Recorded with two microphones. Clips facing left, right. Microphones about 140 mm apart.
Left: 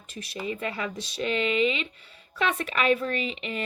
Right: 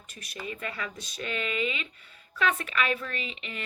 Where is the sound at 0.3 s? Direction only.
20° left (ahead or behind).